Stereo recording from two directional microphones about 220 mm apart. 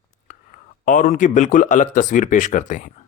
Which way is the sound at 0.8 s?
35° left (ahead or behind).